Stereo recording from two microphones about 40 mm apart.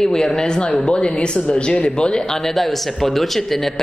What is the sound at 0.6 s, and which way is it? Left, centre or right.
A man's voice, left.